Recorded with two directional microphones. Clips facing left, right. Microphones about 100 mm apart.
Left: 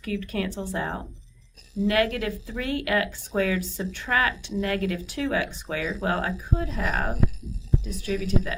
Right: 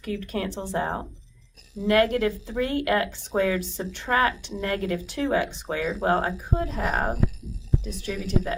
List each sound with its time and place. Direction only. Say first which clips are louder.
0.0 s speech: even; 30° right (ahead or behind)